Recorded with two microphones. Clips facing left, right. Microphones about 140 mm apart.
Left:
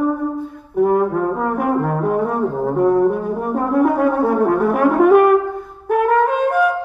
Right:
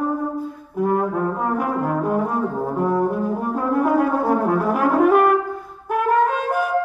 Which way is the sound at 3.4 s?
60° left (ahead or behind).